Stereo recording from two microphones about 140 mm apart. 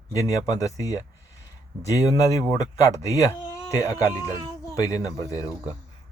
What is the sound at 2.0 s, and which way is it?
Speech, 25° left (ahead or behind).